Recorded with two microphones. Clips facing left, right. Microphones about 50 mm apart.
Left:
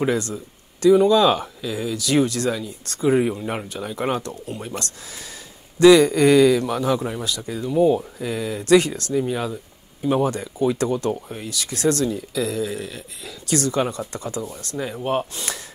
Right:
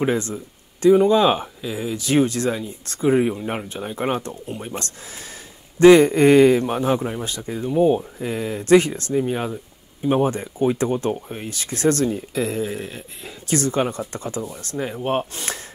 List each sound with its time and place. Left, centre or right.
0.0 s speech: right
3.3 s speech: centre; by 15.6 s right